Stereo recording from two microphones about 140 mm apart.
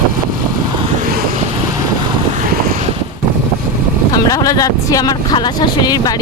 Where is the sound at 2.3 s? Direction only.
80° right.